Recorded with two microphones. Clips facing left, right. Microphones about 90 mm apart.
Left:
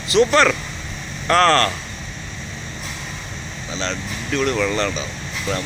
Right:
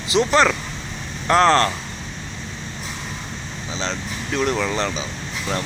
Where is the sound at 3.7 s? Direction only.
20° right (ahead or behind).